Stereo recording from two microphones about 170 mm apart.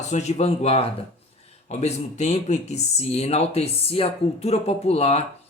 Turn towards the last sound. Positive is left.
turn(degrees=35)  # may be behind; listen again after turning